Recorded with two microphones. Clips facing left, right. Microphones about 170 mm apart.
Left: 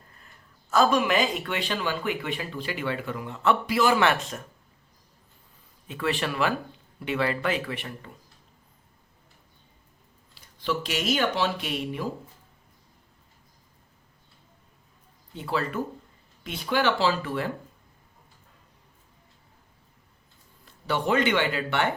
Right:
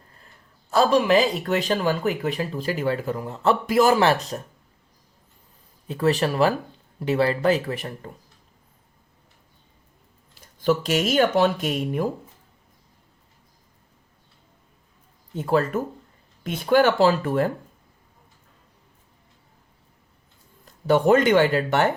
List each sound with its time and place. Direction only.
0.7 s speech: 35° right (ahead or behind)
5.9 s speech: 40° right (ahead or behind)
10.4 s speech: 45° right (ahead or behind)
15.4 s speech: 45° right (ahead or behind)
20.7 s speech: 45° right (ahead or behind)